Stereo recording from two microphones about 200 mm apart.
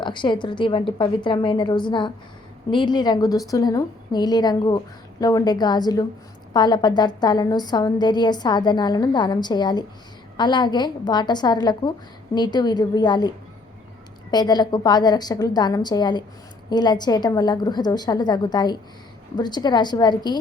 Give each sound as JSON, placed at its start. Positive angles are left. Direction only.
{"t": 0.0, "sound": "a woman's voice", "side_deg": 25}